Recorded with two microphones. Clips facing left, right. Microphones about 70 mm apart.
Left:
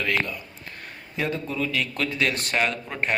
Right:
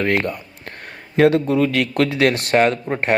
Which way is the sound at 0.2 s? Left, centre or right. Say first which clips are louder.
Right 5 dB; right.